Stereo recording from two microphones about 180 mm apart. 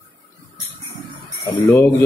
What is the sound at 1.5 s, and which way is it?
Speech, 15° left (ahead or behind).